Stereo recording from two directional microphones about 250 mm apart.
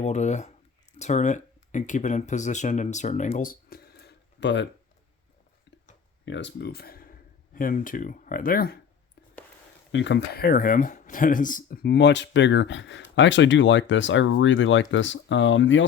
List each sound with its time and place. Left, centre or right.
0.0 s speech: left
6.2 s speech: left
9.9 s speech: left